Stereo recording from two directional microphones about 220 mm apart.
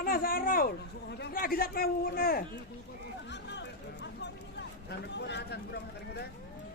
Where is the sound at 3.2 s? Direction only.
50° left (ahead or behind).